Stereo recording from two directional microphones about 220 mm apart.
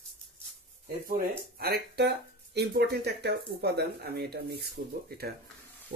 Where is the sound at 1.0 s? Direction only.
40° right (ahead or behind).